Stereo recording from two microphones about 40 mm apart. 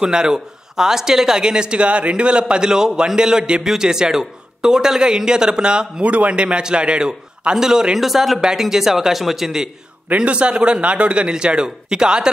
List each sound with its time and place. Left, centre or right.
0.0 s a man's voice: centre
6.0 s speech: right; by 8.0 s centre
8.0 s a man's voice: centre
10.1 s speech: right